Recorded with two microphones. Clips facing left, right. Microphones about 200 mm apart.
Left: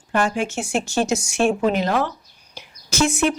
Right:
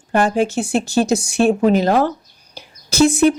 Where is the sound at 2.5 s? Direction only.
35° right (ahead or behind).